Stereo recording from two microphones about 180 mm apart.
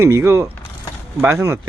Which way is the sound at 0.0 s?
15° right (ahead or behind).